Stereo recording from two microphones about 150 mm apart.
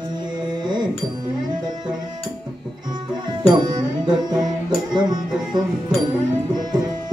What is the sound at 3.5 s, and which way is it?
Music, 30° right (ahead or behind).